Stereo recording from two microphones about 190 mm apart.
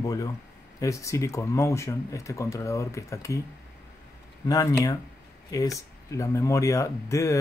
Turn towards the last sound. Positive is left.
turn(degrees=15)  # may be behind; listen again after turning